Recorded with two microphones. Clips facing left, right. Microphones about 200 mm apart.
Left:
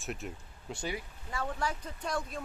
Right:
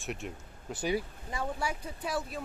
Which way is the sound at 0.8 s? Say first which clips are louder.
Right 8 dB; 20° right (ahead or behind).